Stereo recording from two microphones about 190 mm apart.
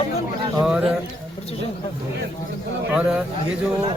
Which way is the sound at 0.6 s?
5° right (ahead or behind).